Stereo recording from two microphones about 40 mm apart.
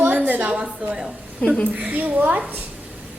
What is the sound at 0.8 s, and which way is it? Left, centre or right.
Speech, right.